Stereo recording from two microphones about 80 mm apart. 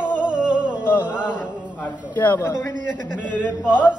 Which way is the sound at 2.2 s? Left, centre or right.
Left.